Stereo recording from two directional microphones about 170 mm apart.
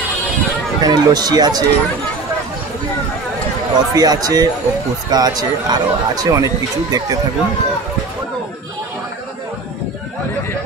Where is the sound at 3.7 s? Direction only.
25° right (ahead or behind).